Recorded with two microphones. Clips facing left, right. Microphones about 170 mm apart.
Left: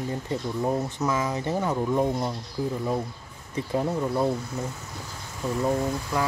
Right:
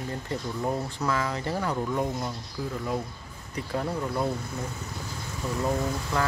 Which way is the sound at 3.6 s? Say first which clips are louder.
Left 4 dB; 20° left (ahead or behind).